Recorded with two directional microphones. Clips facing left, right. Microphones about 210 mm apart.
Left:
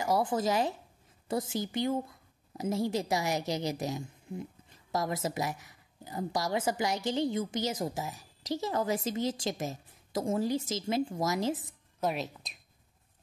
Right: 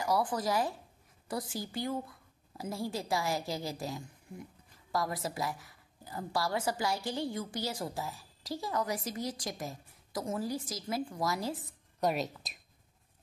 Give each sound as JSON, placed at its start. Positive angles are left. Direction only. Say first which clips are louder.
{"t": 0.0, "sound": "speech", "louder": "left 3 dB", "side_deg": 25}
{"t": 12.0, "sound": "speech", "louder": "right 1 dB", "side_deg": 0}